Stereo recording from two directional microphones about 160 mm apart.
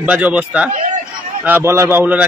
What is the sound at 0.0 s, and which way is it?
A man's voice, 10° right (ahead or behind).